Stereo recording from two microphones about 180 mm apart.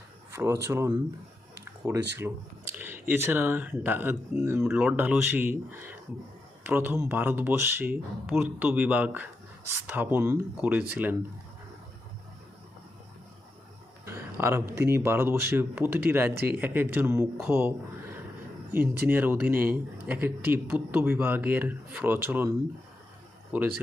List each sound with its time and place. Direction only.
0.3 s speech: 15° right (ahead or behind)
2.7 s speech: 10° right (ahead or behind)
14.0 s speech: 15° right (ahead or behind)
16.3 s speech: 60° right (ahead or behind)
16.6 s speech: 10° right (ahead or behind)